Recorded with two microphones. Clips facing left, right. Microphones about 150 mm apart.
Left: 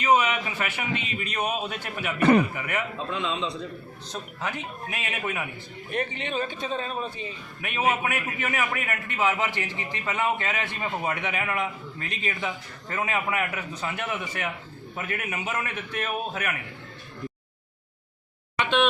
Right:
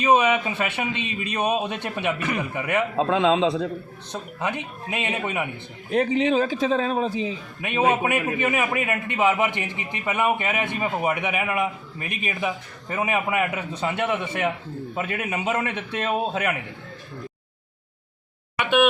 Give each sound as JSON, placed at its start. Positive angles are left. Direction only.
{"t": 0.0, "sound": "a man's voice", "side_deg": -20}
{"t": 2.9, "sound": "speech", "side_deg": -90}
{"t": 4.1, "sound": "a man's voice", "side_deg": -20}
{"t": 5.9, "sound": "speech", "side_deg": -90}
{"t": 7.6, "sound": "a man's voice", "side_deg": -20}
{"t": 18.5, "sound": "a sound", "side_deg": -10}